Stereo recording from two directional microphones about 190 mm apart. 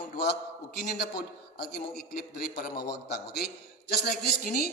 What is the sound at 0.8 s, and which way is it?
A man's voice, 55° left (ahead or behind).